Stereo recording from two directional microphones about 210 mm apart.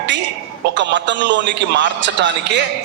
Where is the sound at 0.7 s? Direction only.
60° right (ahead or behind).